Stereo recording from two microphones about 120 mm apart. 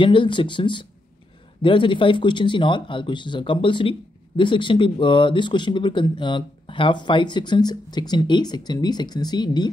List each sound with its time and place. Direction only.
0.0 s speech: 45° left (ahead or behind)